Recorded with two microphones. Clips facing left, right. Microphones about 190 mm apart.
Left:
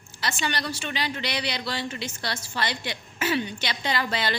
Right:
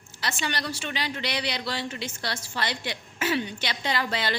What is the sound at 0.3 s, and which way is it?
A woman's voice, 60° right (ahead or behind).